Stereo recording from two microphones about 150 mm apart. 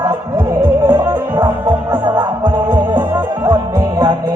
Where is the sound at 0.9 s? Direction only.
20° right (ahead or behind).